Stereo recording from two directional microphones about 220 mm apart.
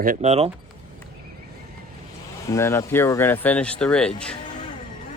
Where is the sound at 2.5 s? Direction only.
10° left (ahead or behind).